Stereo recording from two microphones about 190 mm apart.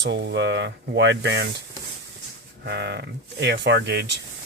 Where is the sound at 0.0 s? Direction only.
60° right (ahead or behind).